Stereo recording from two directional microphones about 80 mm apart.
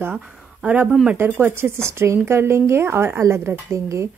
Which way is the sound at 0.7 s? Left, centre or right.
Right.